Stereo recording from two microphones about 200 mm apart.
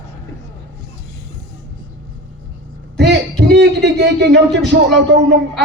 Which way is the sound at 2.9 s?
55° right (ahead or behind).